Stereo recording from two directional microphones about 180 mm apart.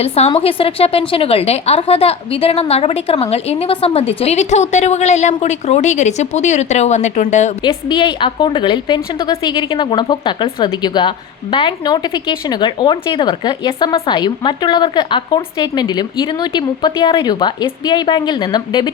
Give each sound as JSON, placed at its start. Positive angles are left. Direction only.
{"t": 0.0, "sound": "a woman's voice", "side_deg": 35}
{"t": 7.6, "sound": "speech", "side_deg": 25}